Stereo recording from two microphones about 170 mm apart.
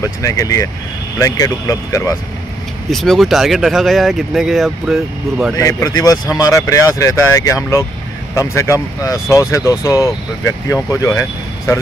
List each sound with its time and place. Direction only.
0.2 s speech: 20° left (ahead or behind)
2.9 s speech: centre (ahead or behind)
5.6 s speech: 20° left (ahead or behind)